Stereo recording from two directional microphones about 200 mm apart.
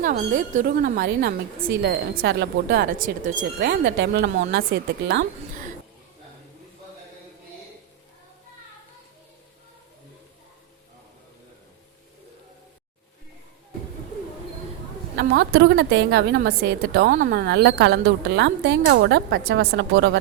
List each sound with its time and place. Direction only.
0.0 s a woman's voice: 40° right (ahead or behind); by 5.2 s 55° right (ahead or behind)
15.1 s a woman's voice: 50° right (ahead or behind)